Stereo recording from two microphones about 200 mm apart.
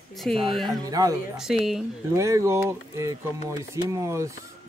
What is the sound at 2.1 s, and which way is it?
Speech, 15° right (ahead or behind).